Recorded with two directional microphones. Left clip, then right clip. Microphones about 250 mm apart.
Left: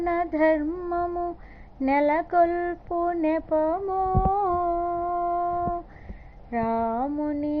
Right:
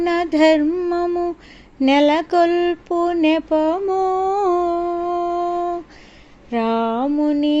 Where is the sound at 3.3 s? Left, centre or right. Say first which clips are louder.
Right 6 dB; right.